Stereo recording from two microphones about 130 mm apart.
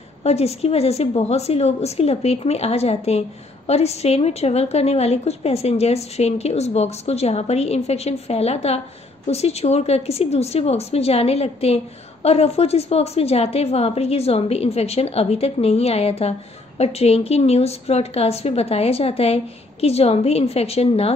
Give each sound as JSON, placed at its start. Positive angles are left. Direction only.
{"t": 0.2, "sound": "a woman's voice", "side_deg": 55}